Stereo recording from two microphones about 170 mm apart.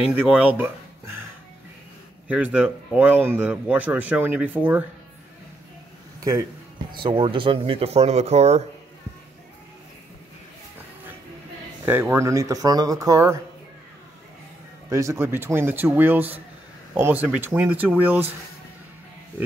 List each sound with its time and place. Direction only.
0.1 s speech: 10° right (ahead or behind)
2.2 s speech: 10° right (ahead or behind)
6.9 s speech: 30° right (ahead or behind)
11.8 s speech: 15° right (ahead or behind)
14.9 s speech: 15° right (ahead or behind)